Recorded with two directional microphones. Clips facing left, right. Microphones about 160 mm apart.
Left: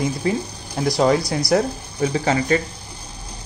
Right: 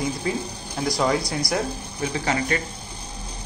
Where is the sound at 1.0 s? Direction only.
30° left (ahead or behind).